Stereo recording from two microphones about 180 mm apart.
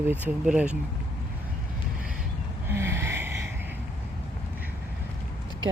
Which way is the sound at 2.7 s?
15° right (ahead or behind).